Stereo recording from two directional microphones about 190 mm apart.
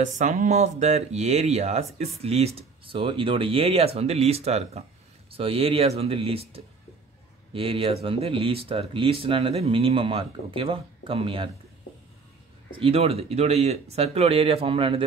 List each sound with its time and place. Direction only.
0.0 s speech: 40° right (ahead or behind)
12.7 s speech: 30° right (ahead or behind)